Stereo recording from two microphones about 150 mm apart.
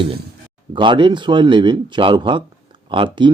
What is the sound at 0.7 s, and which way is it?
Speech, 30° right (ahead or behind).